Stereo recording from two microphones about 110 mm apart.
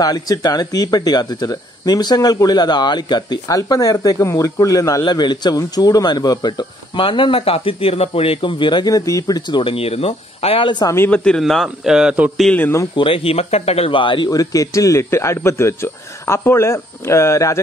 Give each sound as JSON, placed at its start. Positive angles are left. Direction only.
{"t": 0.0, "sound": "speech", "side_deg": 35}
{"t": 9.5, "sound": "speech", "side_deg": 55}
{"t": 11.1, "sound": "a man's voice", "side_deg": 10}
{"t": 12.4, "sound": "speech", "side_deg": 15}
{"t": 12.9, "sound": "speech", "side_deg": 55}
{"t": 14.3, "sound": "speech", "side_deg": 30}